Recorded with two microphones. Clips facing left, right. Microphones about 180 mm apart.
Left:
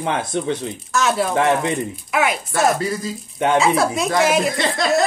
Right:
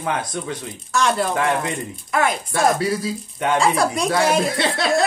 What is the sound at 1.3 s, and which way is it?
Speech, 25° left (ahead or behind).